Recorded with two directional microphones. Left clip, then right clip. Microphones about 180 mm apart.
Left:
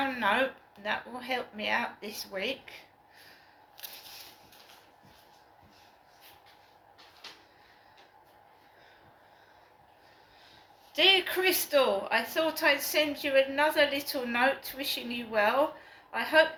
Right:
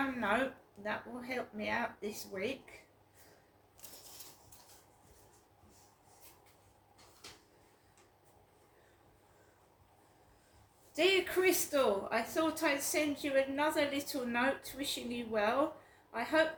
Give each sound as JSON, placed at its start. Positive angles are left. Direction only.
{"t": 0.2, "sound": "a woman's voice", "side_deg": -30}
{"t": 10.9, "sound": "a woman's voice", "side_deg": -30}